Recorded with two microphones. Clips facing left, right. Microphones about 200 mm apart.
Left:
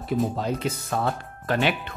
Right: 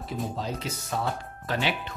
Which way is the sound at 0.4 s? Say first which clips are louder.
Left 6 dB; 55° left (ahead or behind).